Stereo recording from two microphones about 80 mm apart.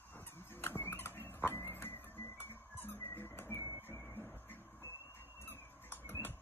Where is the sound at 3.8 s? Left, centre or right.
Left.